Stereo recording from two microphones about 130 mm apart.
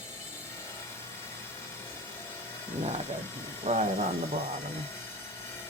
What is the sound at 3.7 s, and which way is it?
Speech, 70° right (ahead or behind).